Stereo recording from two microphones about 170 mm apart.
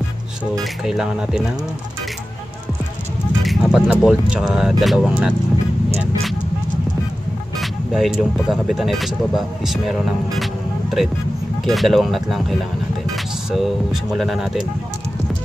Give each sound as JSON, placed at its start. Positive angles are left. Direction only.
{"t": 0.8, "sound": "speech", "side_deg": -5}
{"t": 3.4, "sound": "speech", "side_deg": 0}
{"t": 7.9, "sound": "speech", "side_deg": 0}
{"t": 14.1, "sound": "speech", "side_deg": 0}